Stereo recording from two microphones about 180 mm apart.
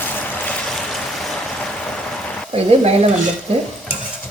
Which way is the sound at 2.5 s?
35° right (ahead or behind).